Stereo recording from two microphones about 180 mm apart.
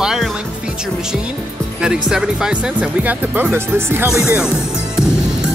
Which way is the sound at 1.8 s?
5° right (ahead or behind).